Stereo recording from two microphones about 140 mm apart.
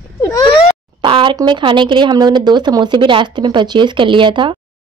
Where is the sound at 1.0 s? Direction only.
35° right (ahead or behind).